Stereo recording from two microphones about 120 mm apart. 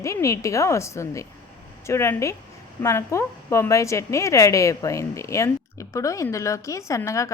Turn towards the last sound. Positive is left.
turn(degrees=25)  # may be behind; listen again after turning